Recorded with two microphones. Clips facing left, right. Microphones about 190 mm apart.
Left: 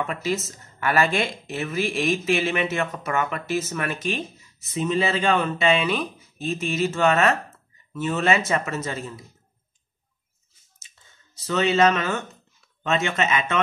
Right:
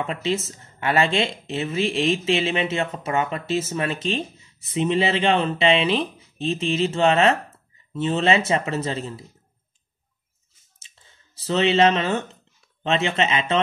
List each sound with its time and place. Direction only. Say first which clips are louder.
0.0 s speech: right 1 dB; 30° right (ahead or behind)
11.4 s speech: right 1 dB; 30° right (ahead or behind)